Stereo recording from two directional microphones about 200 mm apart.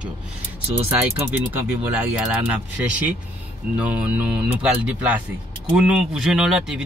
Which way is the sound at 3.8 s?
5° right (ahead or behind).